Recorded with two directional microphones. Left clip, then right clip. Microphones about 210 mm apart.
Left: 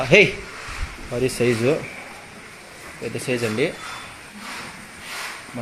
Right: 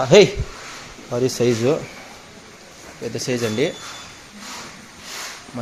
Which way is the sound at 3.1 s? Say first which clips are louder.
Right 1 dB; 25° right (ahead or behind).